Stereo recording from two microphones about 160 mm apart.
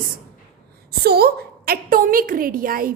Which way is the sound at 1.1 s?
80° right.